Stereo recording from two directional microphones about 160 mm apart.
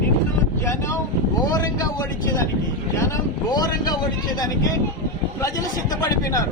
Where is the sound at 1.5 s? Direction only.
20° left (ahead or behind).